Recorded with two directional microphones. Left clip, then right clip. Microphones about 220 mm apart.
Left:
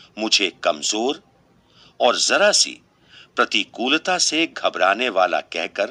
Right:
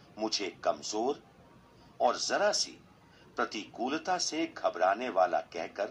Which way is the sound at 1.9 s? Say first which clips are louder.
Left 12 dB; 65° left (ahead or behind).